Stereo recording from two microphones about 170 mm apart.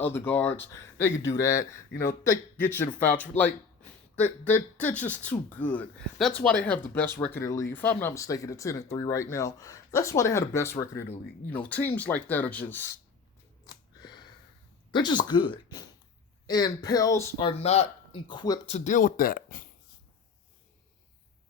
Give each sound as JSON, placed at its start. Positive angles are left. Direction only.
{"t": 0.0, "sound": "speech", "side_deg": 10}
{"t": 13.7, "sound": "a sound", "side_deg": 25}
{"t": 14.9, "sound": "speech", "side_deg": 25}
{"t": 17.3, "sound": "speech", "side_deg": 35}
{"t": 18.6, "sound": "speech", "side_deg": 45}